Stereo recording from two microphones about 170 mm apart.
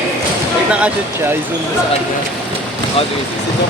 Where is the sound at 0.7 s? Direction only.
5° right (ahead or behind).